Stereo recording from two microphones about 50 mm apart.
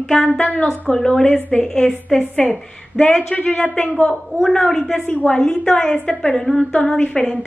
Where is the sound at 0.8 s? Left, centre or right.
Centre.